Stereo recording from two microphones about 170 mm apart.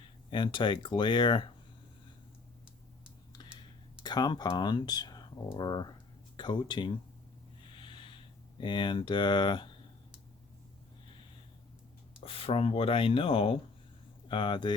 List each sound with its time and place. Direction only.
0.3 s speech: 25° left (ahead or behind)
4.0 s speech: 25° left (ahead or behind)
7.6 s snort: 30° left (ahead or behind)
8.6 s speech: 25° left (ahead or behind)
12.2 s speech: 35° left (ahead or behind)